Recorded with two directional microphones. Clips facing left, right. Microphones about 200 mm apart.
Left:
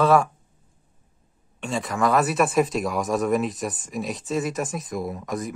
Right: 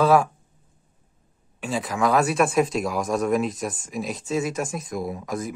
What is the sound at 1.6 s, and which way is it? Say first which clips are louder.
Speech: even; centre (ahead or behind).